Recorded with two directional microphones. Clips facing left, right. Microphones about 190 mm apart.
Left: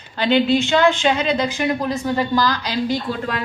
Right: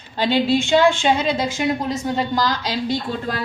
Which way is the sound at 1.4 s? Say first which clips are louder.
Left 1 dB; 20° right (ahead or behind).